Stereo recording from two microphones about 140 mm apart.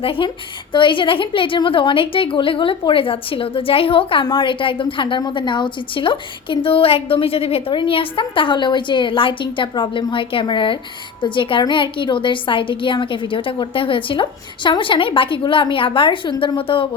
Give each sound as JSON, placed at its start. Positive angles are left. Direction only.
{"t": 0.0, "sound": "a woman's voice", "side_deg": 40}